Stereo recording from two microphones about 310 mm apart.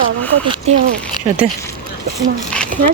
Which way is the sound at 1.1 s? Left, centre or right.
Centre.